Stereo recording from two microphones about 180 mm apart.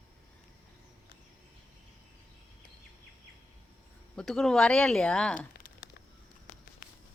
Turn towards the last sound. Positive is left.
turn(degrees=55)  # may be behind; listen again after turning